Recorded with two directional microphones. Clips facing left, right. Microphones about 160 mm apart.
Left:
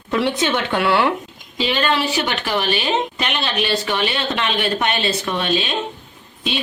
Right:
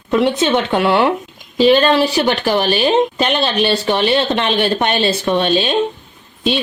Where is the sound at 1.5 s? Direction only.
40° right (ahead or behind).